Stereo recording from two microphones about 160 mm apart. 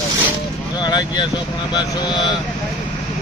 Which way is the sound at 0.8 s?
30° left (ahead or behind).